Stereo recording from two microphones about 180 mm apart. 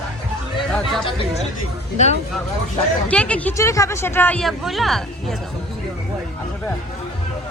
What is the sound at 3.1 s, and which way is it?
Speech, 5° left (ahead or behind).